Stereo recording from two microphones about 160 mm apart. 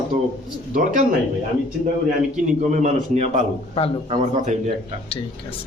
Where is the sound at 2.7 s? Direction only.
50° right (ahead or behind).